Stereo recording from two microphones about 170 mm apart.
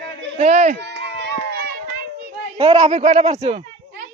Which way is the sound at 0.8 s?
90° right.